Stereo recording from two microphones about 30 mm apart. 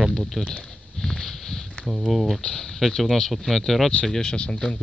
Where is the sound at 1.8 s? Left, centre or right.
Centre.